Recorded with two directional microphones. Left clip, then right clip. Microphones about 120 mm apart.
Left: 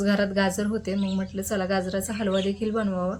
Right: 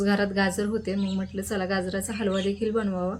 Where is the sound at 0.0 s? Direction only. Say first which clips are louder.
Left 1 dB; 20° left (ahead or behind).